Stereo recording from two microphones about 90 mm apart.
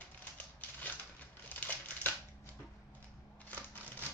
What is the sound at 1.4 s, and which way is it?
Crumpling, 15° left (ahead or behind).